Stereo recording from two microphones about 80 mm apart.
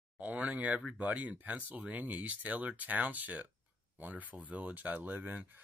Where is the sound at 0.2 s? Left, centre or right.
Centre.